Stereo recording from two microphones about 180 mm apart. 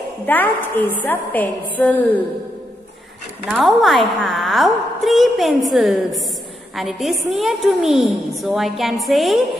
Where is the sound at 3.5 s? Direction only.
Centre (ahead or behind).